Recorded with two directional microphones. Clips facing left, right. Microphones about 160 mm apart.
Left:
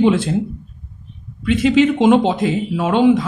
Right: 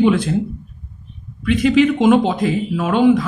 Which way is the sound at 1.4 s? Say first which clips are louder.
Even; 25° left (ahead or behind).